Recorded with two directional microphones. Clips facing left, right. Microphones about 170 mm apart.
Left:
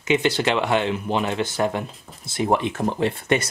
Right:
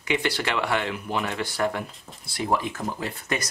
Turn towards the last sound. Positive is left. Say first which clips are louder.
# left 8 dB
turn(degrees=25)  # may be behind; listen again after turning